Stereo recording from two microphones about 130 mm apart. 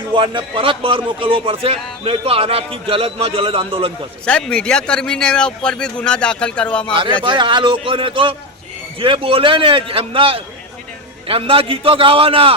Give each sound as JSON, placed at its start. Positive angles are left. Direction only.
{"t": 0.1, "sound": "speech", "side_deg": -40}
{"t": 4.3, "sound": "a man's voice", "side_deg": 10}
{"t": 7.3, "sound": "a man's voice", "side_deg": -40}